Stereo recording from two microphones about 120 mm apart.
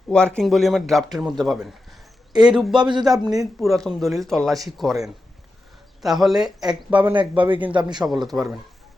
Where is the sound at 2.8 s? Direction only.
40° right (ahead or behind).